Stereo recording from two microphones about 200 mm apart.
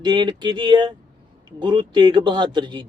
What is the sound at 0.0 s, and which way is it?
A man's voice, 20° right (ahead or behind).